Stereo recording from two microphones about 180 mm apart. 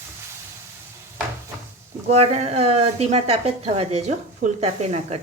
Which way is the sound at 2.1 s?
35° right (ahead or behind).